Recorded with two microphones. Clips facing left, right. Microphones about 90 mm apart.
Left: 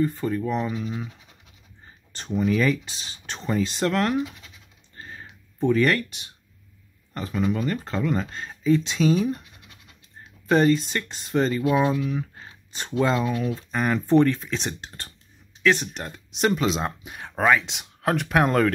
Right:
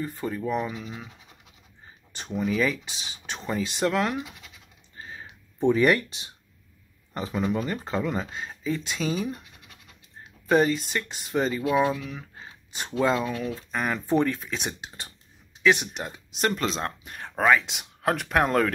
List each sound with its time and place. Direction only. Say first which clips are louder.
0.0 s speech: left 6 dB; 10° right (ahead or behind)
2.1 s speech: left 3 dB; 5° right (ahead or behind)
4.9 s typing: even; 5° right (ahead or behind)
5.2 s a sound: right 1 dB; 20° right (ahead or behind)
6.0 s speech: right 1 dB; 30° right (ahead or behind)
7.2 s speech: left 2 dB; 15° right (ahead or behind)
10.5 s speech: left 2 dB; 5° right (ahead or behind)
11.7 s speech: left 2 dB; 5° left (ahead or behind)